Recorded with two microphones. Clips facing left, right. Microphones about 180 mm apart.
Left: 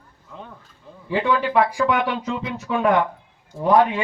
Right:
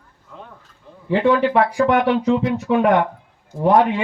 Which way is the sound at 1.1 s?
55° right (ahead or behind).